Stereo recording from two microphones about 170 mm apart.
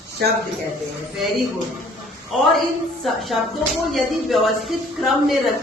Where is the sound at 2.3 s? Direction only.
Centre (ahead or behind).